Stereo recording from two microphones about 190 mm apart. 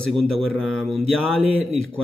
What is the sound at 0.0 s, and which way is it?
Speech, 5° left (ahead or behind).